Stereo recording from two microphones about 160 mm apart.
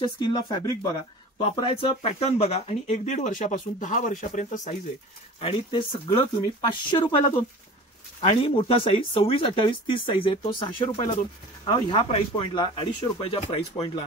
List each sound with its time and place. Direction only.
0.0 s speech: 25° left (ahead or behind); by 4.7 s 50° left (ahead or behind)
5.4 s speech: 35° left (ahead or behind)
8.2 s speech: 35° left (ahead or behind)